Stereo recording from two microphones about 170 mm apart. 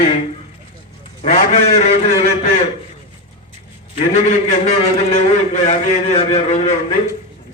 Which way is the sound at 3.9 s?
40° left (ahead or behind).